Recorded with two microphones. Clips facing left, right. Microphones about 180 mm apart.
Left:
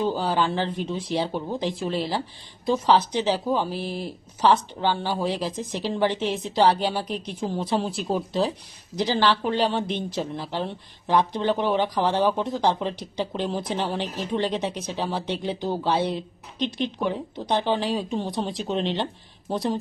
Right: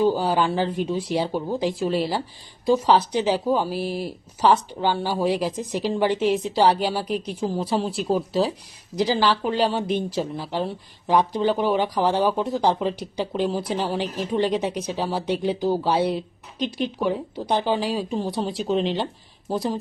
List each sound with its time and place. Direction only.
0.0 s a woman's voice: 10° right (ahead or behind)